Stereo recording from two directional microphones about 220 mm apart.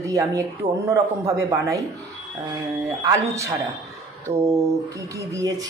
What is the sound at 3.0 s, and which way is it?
Speech, 15° right (ahead or behind).